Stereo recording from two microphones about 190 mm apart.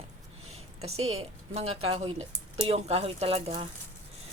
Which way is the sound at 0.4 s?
35° right (ahead or behind).